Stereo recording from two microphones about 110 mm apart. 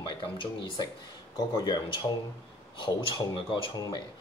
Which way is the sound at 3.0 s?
50° left (ahead or behind).